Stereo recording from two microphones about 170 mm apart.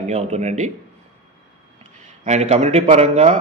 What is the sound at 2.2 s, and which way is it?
Speech, 40° right (ahead or behind).